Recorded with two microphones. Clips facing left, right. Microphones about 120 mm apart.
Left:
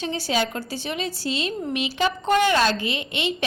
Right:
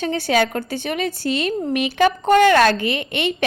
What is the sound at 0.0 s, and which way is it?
A woman's voice, 60° right (ahead or behind).